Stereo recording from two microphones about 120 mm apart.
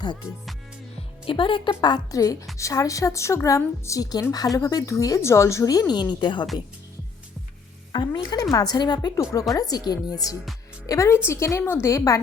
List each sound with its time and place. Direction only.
1.2 s a woman's voice: 45° left (ahead or behind)
7.9 s a woman's voice: 40° left (ahead or behind)